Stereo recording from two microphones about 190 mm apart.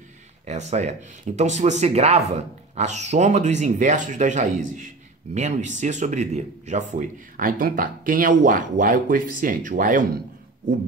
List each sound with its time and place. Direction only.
0.5 s speech: 35° right (ahead or behind)